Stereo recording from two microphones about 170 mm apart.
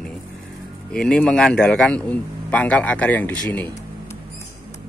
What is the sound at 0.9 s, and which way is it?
A man's voice, 5° left (ahead or behind).